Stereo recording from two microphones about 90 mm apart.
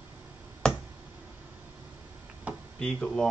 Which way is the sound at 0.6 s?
10° left (ahead or behind).